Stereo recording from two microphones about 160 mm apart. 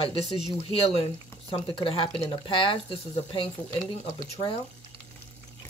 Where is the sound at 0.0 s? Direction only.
35° left (ahead or behind).